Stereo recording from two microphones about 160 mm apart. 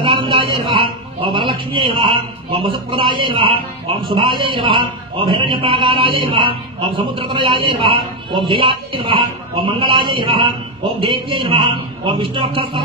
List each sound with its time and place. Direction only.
0.0 s a man's voice: 30° right (ahead or behind)